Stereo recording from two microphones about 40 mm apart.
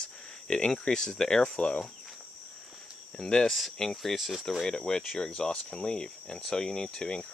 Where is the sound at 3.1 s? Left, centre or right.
Centre.